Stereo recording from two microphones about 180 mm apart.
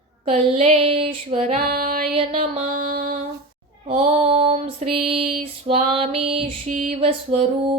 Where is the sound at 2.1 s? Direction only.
35° right (ahead or behind).